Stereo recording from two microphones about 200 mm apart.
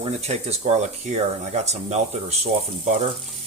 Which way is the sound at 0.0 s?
30° right (ahead or behind).